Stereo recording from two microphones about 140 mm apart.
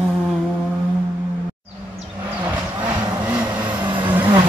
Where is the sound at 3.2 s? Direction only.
10° right (ahead or behind).